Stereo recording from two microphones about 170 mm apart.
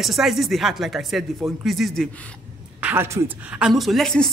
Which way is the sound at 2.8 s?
10° right (ahead or behind).